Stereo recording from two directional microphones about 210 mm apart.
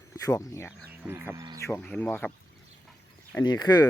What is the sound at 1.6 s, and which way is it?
Speech, 15° left (ahead or behind).